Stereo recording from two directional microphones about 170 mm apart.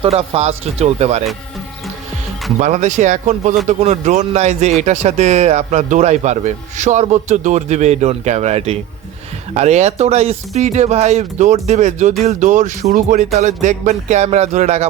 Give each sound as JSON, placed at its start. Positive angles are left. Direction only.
{"t": 0.0, "sound": "speech", "side_deg": -35}
{"t": 2.6, "sound": "speech", "side_deg": -45}